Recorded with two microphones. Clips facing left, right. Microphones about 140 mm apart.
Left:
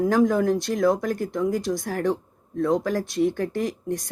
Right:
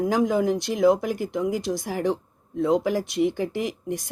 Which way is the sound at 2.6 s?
20° right (ahead or behind).